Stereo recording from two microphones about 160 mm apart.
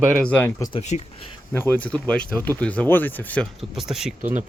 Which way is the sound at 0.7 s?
45° left (ahead or behind).